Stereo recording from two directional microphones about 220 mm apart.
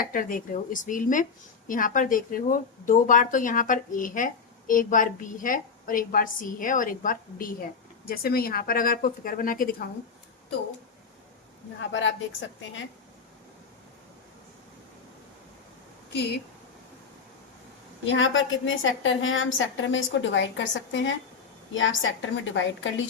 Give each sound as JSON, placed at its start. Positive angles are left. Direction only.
{"t": 0.0, "sound": "speech", "side_deg": 40}
{"t": 11.8, "sound": "a woman's voice", "side_deg": 55}
{"t": 16.1, "sound": "speech", "side_deg": 50}
{"t": 18.0, "sound": "a woman's voice", "side_deg": 60}